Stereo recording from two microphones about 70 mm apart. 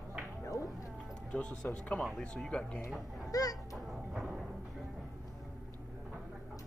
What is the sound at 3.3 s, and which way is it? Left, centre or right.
Speech, left.